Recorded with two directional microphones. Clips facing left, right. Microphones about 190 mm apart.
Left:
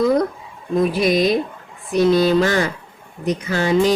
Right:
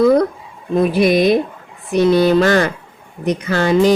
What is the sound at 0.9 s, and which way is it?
Speech, 55° right (ahead or behind).